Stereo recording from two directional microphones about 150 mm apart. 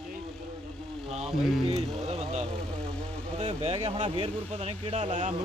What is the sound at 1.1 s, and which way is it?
Speech, 45° right (ahead or behind).